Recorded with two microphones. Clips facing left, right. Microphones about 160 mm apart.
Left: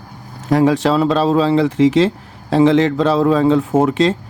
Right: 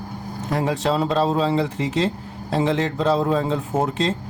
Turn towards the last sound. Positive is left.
turn(degrees=90)